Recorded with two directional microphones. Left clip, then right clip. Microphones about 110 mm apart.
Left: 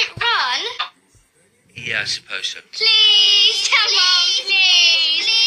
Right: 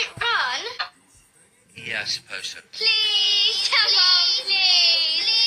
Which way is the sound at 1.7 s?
35° left (ahead or behind).